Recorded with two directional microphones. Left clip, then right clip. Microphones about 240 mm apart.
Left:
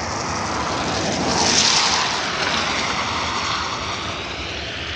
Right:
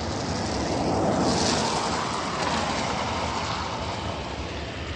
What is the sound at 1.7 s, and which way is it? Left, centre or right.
Vehicle, right.